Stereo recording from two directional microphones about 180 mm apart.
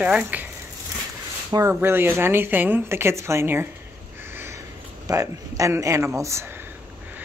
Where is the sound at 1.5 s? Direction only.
15° right (ahead or behind).